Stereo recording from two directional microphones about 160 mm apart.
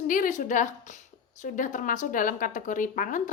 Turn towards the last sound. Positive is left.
turn(degrees=55)  # may be behind; listen again after turning